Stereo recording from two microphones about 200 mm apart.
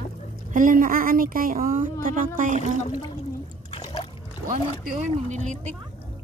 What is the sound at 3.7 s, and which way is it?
Splash, 30° left (ahead or behind).